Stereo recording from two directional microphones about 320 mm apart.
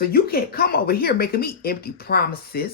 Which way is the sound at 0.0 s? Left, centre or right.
Left.